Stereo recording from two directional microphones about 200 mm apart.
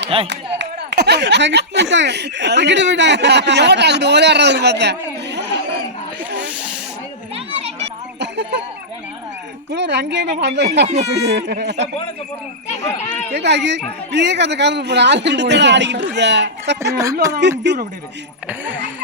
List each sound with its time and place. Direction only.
0.3 s speech: 60° right (ahead or behind)
9.7 s speech: 60° right (ahead or behind)
10.8 s speech: 35° right (ahead or behind)
11.3 s speech: 60° right (ahead or behind)
13.3 s speech: 60° right (ahead or behind)
17.2 s speech: 15° right (ahead or behind)
17.7 s speech: 60° right (ahead or behind)
18.4 s speech: 10° right (ahead or behind)